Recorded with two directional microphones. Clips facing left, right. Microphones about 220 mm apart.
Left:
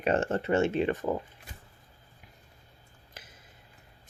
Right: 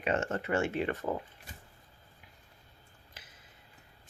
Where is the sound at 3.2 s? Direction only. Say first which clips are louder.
Left 5 dB; 45° left (ahead or behind).